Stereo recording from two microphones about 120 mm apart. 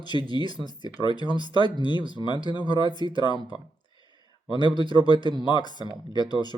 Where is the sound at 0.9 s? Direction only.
35° left (ahead or behind).